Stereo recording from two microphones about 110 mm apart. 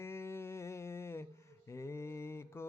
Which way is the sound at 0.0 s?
25° left (ahead or behind).